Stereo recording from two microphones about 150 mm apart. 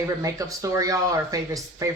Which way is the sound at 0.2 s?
20° right (ahead or behind).